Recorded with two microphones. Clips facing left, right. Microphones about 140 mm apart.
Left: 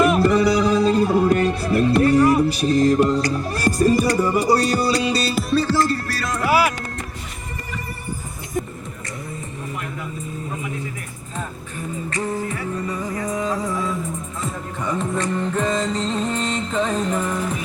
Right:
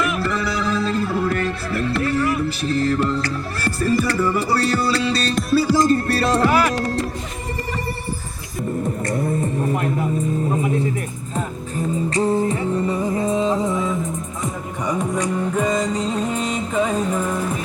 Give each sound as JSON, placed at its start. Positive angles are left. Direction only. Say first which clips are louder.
{"t": 0.2, "sound": "music", "louder": "left 7 dB", "side_deg": 15}
{"t": 9.0, "sound": "music", "louder": "right 10 dB", "side_deg": -55}
{"t": 12.1, "sound": "music", "louder": "right 6 dB", "side_deg": -30}